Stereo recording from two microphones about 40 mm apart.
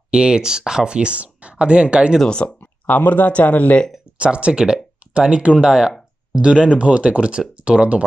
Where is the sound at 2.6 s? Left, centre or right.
Left.